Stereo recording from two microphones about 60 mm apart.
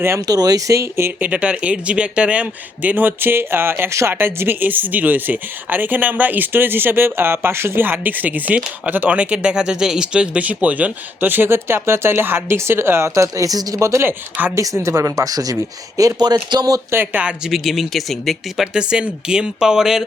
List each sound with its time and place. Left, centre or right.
0.2 s speech: right
0.8 s speech: right
1.2 s speech: centre; by 13.7 s right
13.7 s speech: right
16.0 s speech: right
16.9 s speech: right
17.4 s speech: centre
18.6 s speech: centre